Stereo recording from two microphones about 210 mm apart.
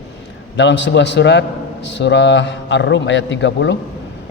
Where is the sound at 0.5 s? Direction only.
55° left (ahead or behind).